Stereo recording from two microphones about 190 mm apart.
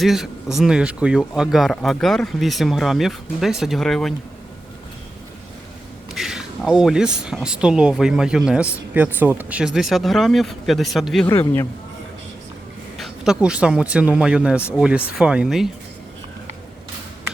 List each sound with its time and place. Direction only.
0.0 s speech: centre (ahead or behind)
6.1 s speech: centre (ahead or behind)
11.3 s speech: 15° left (ahead or behind)
13.0 s speech: 5° right (ahead or behind)